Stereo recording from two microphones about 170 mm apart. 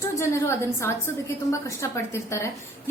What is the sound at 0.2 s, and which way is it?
A woman's voice, 15° left (ahead or behind).